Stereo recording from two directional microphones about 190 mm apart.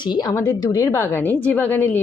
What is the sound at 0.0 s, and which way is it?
A woman's voice, 20° left (ahead or behind).